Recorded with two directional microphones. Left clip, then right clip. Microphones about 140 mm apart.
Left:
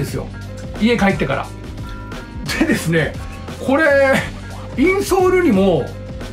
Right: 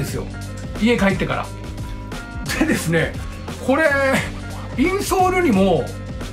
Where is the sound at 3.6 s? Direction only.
5° left (ahead or behind).